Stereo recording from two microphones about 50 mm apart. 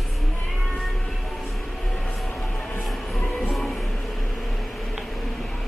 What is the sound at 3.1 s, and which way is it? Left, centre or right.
Train, left.